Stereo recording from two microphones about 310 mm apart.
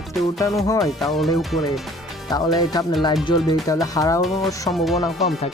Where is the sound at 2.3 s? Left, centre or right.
Centre.